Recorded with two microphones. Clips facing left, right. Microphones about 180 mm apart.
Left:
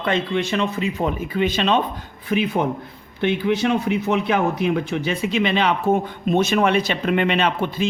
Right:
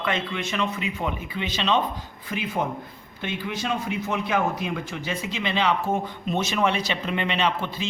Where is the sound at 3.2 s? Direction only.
65° left (ahead or behind).